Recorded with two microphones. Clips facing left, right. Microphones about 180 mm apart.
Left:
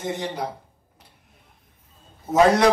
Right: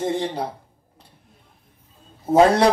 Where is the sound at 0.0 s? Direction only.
30° right (ahead or behind).